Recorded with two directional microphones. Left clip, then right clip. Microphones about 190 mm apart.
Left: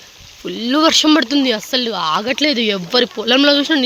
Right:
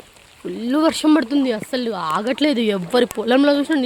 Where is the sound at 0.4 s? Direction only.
5° left (ahead or behind).